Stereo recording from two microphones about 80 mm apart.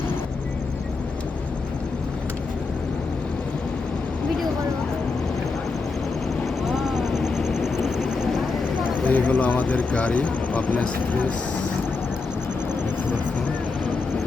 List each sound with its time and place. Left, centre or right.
6.7 s vehicle: centre
9.0 s speech: centre